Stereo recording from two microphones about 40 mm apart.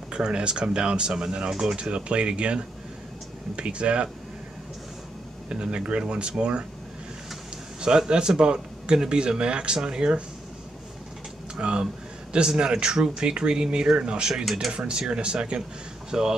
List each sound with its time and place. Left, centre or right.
0.1 s speech: right
1.8 s speech: right
5.5 s speech: right
8.1 s speech: right
11.5 s speech: right
14.3 s speech: centre
14.9 s speech: right